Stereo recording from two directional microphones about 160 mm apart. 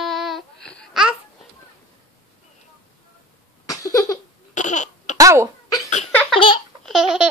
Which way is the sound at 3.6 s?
20° left (ahead or behind).